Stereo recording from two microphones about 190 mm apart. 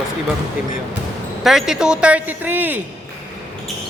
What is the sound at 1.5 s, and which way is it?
Speech, centre (ahead or behind).